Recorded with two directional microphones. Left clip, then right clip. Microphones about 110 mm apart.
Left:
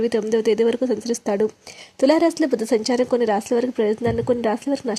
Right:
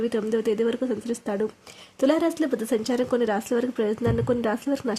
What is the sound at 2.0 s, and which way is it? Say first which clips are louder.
A woman's voice: left 5 dB; 20° left (ahead or behind).